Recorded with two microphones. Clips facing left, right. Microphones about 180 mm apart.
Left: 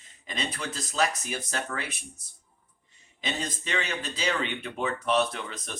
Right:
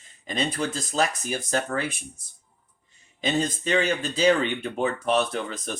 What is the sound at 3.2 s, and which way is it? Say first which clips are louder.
Speech: right 8 dB; 40° right (ahead or behind).